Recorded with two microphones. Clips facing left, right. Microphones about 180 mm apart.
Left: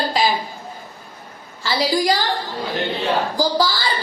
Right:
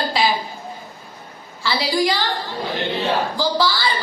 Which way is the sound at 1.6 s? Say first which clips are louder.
Left 1 dB; 40° left (ahead or behind).